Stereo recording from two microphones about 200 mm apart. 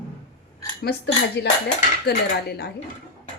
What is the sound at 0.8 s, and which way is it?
Speech, 55° left (ahead or behind).